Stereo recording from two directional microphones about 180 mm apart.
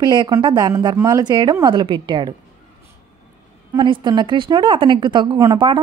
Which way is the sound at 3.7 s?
25° right (ahead or behind).